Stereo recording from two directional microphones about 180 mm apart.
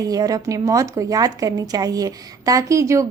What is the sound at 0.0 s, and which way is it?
A woman's voice, 20° right (ahead or behind).